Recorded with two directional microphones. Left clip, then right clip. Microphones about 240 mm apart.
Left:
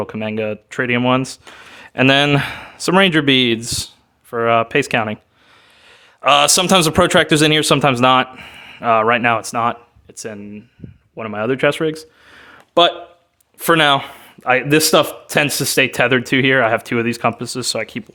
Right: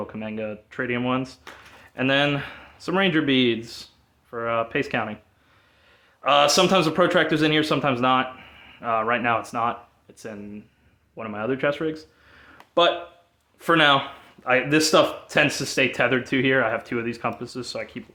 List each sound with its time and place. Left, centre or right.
0.0 s speech: left
6.2 s speech: left